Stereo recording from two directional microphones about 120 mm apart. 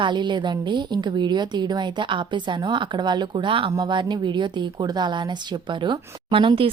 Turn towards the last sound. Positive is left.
turn(degrees=-50)  # may be behind; listen again after turning